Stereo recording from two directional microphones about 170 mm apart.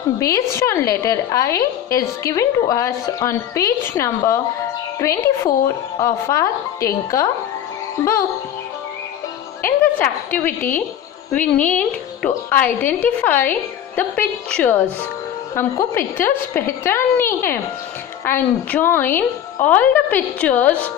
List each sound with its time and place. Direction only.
0.2 s a woman's voice: 20° left (ahead or behind)
9.6 s a woman's voice: 10° left (ahead or behind)